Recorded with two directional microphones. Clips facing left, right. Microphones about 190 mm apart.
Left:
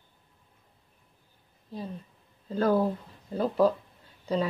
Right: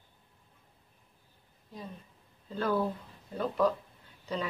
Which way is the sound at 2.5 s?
40° left (ahead or behind).